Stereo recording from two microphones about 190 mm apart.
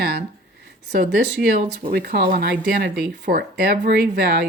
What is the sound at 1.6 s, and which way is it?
Speech, 55° right (ahead or behind).